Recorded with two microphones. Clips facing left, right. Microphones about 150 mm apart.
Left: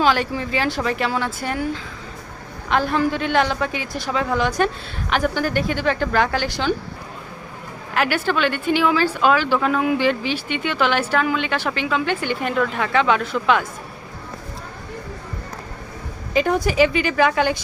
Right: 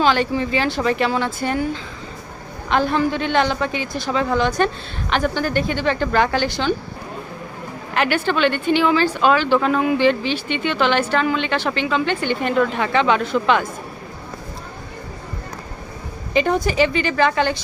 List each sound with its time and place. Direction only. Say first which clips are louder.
0.0 s a woman's voice: right 2 dB; 5° left (ahead or behind)
7.9 s a woman's voice: right 1 dB; 5° left (ahead or behind)
16.3 s speech: right 1 dB; 5° left (ahead or behind)